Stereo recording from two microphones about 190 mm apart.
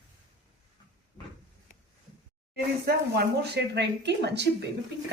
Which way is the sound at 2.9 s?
60° right (ahead or behind).